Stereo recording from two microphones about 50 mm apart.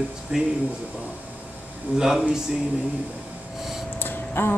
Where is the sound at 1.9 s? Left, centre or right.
Centre.